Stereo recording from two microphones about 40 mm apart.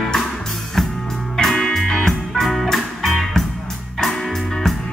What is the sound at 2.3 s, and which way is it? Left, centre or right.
Music, centre.